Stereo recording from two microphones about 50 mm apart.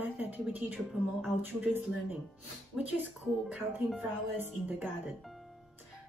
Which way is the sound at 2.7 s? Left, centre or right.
Centre.